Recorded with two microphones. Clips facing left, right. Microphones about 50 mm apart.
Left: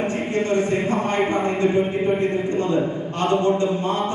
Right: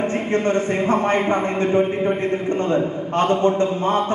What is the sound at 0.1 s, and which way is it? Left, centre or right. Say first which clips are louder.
A man's voice: right 2 dB; right.